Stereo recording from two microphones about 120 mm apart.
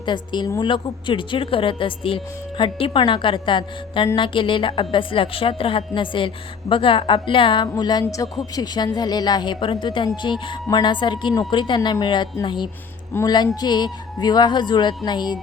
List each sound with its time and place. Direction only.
0.0 s a woman's voice: 40° left (ahead or behind)